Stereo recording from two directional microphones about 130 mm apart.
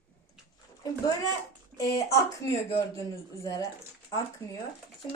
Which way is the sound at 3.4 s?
25° left (ahead or behind).